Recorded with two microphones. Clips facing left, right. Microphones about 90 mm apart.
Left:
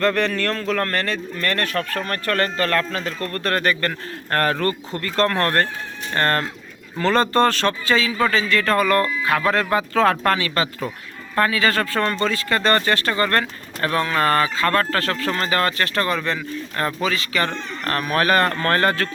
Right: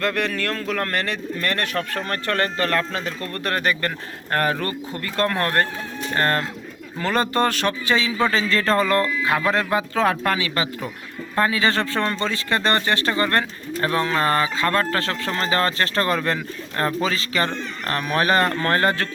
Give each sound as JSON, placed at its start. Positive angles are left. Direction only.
{"t": 0.0, "sound": "speech", "side_deg": -5}